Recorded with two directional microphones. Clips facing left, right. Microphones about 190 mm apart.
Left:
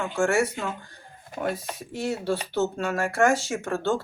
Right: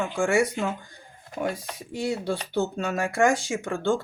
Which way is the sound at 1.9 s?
15° right (ahead or behind).